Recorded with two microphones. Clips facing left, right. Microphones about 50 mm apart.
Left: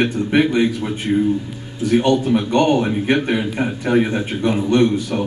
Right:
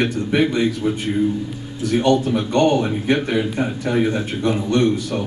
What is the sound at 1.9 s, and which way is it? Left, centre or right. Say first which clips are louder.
A man's voice: left 2 dB; centre.